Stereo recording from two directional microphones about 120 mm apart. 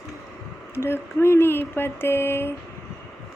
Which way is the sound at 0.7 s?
20° left (ahead or behind).